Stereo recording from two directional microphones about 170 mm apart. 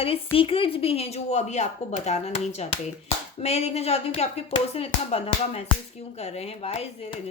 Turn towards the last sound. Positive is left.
turn(degrees=35)  # may be behind; listen again after turning